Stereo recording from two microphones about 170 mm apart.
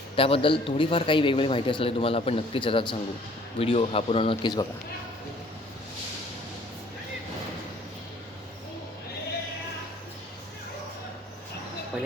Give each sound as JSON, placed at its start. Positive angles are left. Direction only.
{"t": 0.2, "sound": "a man's voice", "side_deg": 35}